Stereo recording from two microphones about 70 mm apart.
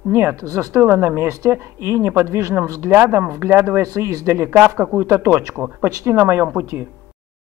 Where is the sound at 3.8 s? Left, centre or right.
Right.